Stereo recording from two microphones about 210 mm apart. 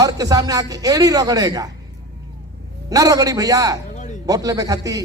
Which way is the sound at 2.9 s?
15° right (ahead or behind).